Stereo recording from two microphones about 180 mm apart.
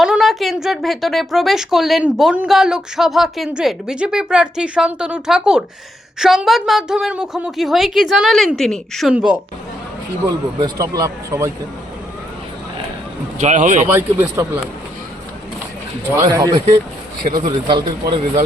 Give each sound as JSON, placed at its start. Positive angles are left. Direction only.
{"t": 0.0, "sound": "a woman's voice", "side_deg": 0}
{"t": 10.2, "sound": "speech", "side_deg": -20}
{"t": 13.4, "sound": "speech", "side_deg": -45}
{"t": 13.8, "sound": "speech", "side_deg": -10}
{"t": 16.1, "sound": "speech", "side_deg": -20}
{"t": 17.7, "sound": "speech", "side_deg": -25}